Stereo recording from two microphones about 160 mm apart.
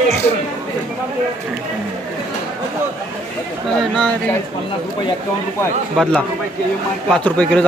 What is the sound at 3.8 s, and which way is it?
Speech, 5° left (ahead or behind).